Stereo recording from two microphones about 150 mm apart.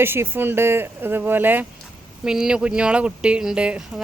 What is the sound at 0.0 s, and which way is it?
Speech, 15° right (ahead or behind).